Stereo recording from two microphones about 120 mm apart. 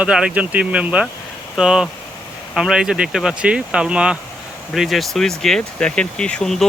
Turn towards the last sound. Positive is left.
turn(degrees=5)  # may be behind; listen again after turning